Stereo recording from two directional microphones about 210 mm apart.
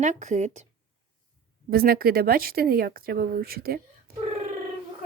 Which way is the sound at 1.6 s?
45° right (ahead or behind).